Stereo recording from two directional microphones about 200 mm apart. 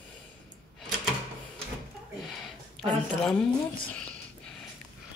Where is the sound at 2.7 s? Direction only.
5° left (ahead or behind).